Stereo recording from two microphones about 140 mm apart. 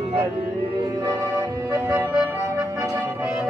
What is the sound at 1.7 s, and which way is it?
Music, 10° right (ahead or behind).